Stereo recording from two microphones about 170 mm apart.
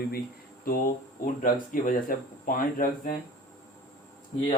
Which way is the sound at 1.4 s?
55° left (ahead or behind).